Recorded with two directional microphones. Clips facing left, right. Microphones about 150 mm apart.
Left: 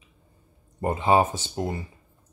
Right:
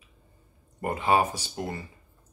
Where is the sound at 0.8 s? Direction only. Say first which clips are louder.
Left 3 dB; 25° left (ahead or behind).